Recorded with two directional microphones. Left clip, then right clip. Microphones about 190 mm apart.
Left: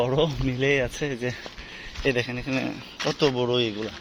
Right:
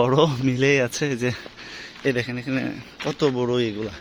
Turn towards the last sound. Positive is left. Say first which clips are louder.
# right 1 dB
turn(degrees=-25)  # may be behind; listen again after turning